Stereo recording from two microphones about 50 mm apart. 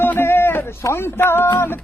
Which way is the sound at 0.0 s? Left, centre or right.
Left.